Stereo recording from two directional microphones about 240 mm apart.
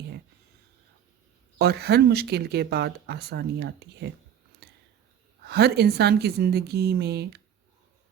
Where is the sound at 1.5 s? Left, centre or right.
Right.